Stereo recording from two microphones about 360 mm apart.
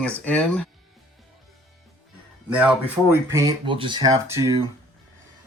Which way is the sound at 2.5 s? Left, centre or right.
Centre.